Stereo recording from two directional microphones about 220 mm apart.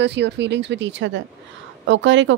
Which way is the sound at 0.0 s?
50° right (ahead or behind).